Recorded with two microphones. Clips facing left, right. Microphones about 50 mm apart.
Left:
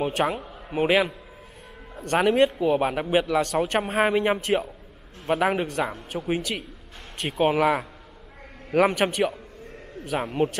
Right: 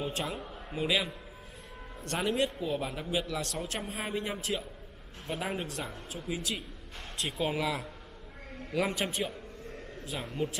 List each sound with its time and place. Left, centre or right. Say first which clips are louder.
0.0 s a man's voice: left 10 dB; left
2.1 s a man's voice: left 11 dB; left
3.5 s a man's voice: left 14 dB; left
7.2 s speech: left 11 dB; left
8.7 s a man's voice: left 10 dB; left
10.3 s speech: left 8 dB; left